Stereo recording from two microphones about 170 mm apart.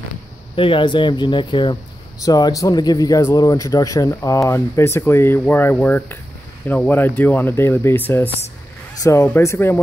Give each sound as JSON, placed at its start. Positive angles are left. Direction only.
{"t": 0.6, "sound": "speech", "side_deg": 30}